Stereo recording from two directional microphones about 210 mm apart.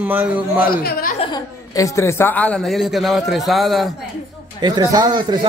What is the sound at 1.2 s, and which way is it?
Speech, 20° left (ahead or behind).